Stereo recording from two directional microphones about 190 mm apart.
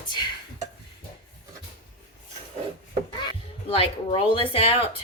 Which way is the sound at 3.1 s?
25° left (ahead or behind).